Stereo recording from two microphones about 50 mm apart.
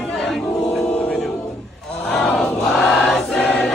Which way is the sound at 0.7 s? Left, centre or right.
Centre.